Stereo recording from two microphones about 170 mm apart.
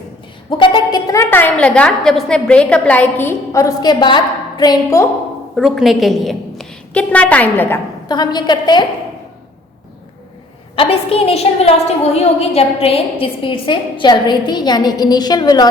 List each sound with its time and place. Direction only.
0.5 s a woman's voice: 30° left (ahead or behind)
5.5 s a woman's voice: centre (ahead or behind)
8.0 s a woman's voice: 25° left (ahead or behind)
10.8 s a woman's voice: 35° left (ahead or behind)